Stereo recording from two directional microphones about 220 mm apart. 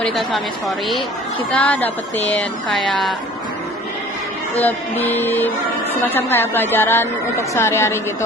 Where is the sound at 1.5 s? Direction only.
5° left (ahead or behind).